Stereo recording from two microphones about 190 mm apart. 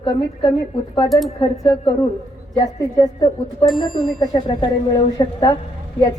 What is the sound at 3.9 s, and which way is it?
A woman's voice, 20° left (ahead or behind).